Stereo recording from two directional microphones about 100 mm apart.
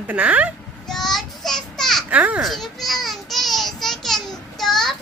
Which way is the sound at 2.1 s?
15° right (ahead or behind).